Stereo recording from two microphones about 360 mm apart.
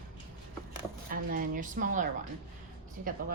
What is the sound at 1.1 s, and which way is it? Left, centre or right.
A woman's voice, right.